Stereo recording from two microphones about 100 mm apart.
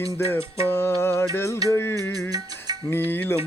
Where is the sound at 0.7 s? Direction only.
25° left (ahead or behind).